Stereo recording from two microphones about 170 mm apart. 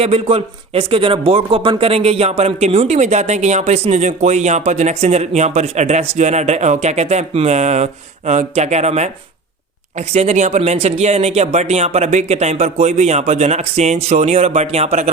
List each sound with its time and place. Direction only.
0.0 s speech: 35° right (ahead or behind)
10.1 s speech: 40° right (ahead or behind)